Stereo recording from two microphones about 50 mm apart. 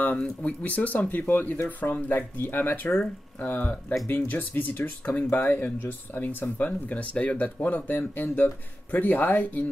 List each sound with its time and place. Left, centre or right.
0.4 s speech: left